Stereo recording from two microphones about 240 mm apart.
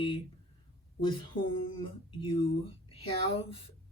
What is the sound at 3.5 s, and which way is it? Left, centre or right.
Speech, left.